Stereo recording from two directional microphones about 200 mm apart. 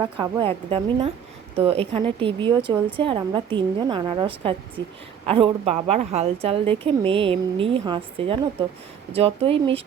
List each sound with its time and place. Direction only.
0.0 s a woman's voice: 20° right (ahead or behind)